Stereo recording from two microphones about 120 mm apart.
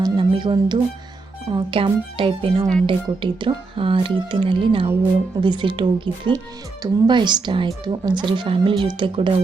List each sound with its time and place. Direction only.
0.0 s music: 40° right (ahead or behind)
1.5 s speech: 50° right (ahead or behind)